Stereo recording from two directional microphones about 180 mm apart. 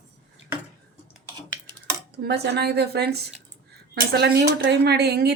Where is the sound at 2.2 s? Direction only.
65° right (ahead or behind).